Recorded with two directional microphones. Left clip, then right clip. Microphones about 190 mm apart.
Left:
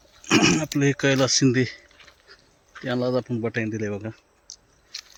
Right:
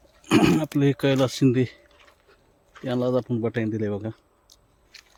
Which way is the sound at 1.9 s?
15° right (ahead or behind).